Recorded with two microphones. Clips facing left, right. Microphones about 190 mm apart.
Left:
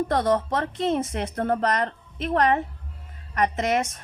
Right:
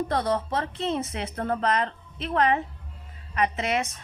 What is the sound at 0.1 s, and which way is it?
A woman's voice, 50° left (ahead or behind).